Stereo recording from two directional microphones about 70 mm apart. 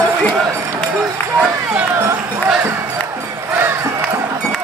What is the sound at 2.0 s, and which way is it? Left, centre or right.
Run, right.